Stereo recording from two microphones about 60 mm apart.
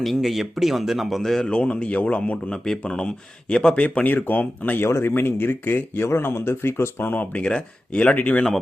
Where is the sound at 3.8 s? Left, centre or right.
Left.